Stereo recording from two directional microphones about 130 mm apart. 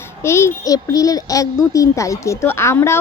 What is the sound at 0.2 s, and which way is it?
Speech, 20° left (ahead or behind).